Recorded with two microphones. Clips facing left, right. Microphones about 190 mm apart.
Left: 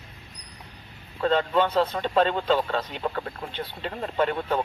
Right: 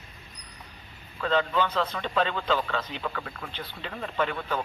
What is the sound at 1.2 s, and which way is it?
A man's voice, 35° left (ahead or behind).